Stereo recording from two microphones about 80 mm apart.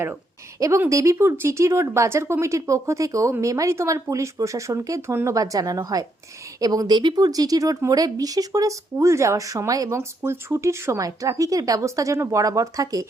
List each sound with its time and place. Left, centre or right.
0.9 s speech: right